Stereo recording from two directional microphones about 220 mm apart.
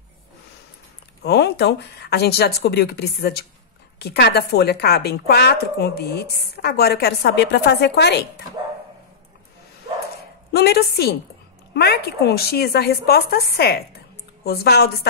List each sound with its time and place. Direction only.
1.2 s speech: 50° left (ahead or behind)
10.5 s speech: 45° left (ahead or behind)